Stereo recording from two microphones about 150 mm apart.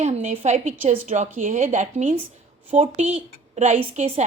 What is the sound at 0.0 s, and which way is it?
A woman's voice, 50° right (ahead or behind).